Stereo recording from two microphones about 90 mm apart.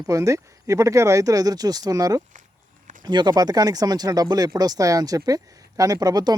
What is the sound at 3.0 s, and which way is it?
Speech, 55° right (ahead or behind).